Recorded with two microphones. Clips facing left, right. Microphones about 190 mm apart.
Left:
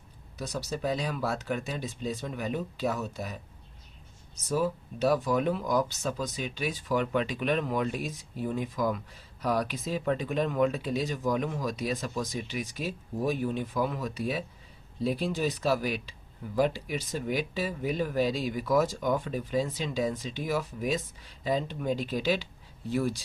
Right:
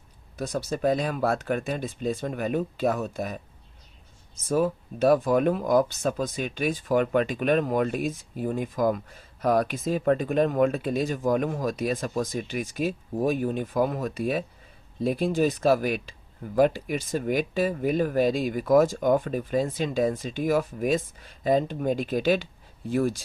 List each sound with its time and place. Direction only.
0.3 s speech: 50° right (ahead or behind)
4.4 s speech: 50° right (ahead or behind)